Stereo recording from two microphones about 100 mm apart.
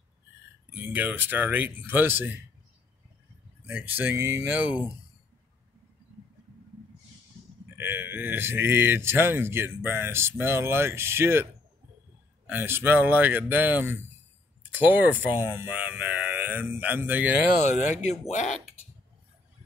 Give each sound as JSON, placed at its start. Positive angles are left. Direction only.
{"t": 0.7, "sound": "speech", "side_deg": -20}
{"t": 3.6, "sound": "speech", "side_deg": -20}
{"t": 7.7, "sound": "speech", "side_deg": -20}
{"t": 12.4, "sound": "speech", "side_deg": -20}